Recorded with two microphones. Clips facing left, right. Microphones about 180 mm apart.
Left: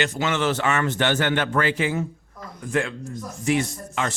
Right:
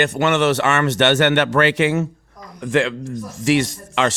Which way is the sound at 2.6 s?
90° right.